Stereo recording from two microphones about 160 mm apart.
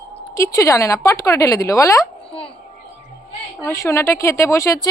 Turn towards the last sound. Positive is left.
turn(degrees=20)  # may be behind; listen again after turning